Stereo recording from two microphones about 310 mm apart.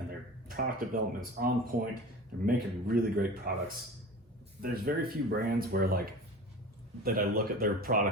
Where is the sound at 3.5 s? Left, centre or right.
Right.